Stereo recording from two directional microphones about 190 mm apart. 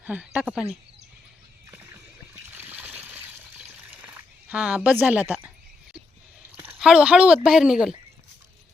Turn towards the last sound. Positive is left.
turn(degrees=-5)  # may be behind; listen again after turning